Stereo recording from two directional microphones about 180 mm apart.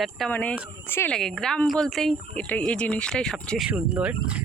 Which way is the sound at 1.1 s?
Centre (ahead or behind).